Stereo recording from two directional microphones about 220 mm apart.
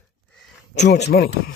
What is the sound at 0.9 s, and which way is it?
Speech, 45° left (ahead or behind).